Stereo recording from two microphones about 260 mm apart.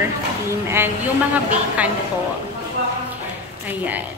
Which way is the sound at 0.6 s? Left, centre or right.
Centre.